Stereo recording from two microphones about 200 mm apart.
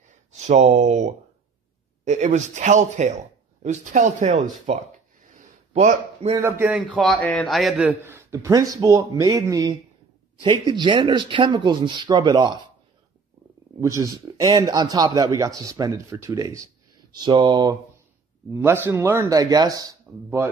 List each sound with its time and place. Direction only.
0.4 s speech: 35° right (ahead or behind)
5.3 s a sound: 35° right (ahead or behind)
6.6 s a man's voice: centre (ahead or behind); by 12.5 s 20° right (ahead or behind)
13.7 s a man's voice: 15° right (ahead or behind)